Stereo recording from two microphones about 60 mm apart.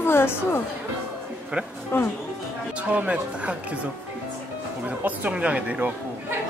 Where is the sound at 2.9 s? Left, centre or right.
Right.